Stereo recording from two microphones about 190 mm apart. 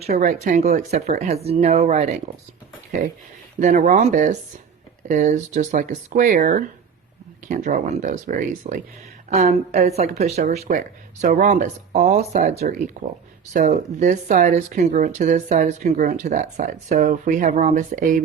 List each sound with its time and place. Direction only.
0.0 s speech: 40° right (ahead or behind)
3.6 s speech: 45° right (ahead or behind)